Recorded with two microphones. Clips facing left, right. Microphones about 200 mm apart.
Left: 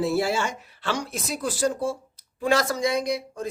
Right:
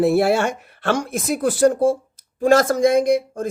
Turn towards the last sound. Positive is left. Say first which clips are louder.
# right 9 dB
turn(degrees=-50)  # may be behind; listen again after turning